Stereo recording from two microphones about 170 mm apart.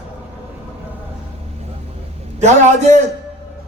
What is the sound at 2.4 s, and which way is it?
Speech, 40° right (ahead or behind).